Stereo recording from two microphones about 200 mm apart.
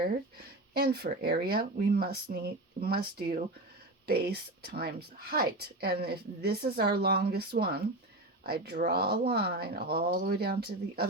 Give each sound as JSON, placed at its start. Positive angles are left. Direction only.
{"t": 0.7, "sound": "a woman's voice", "side_deg": -50}